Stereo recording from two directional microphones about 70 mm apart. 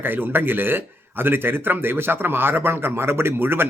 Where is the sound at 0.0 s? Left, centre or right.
Right.